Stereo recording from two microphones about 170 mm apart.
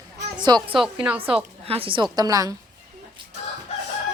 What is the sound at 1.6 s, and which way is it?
Speech, 35° right (ahead or behind).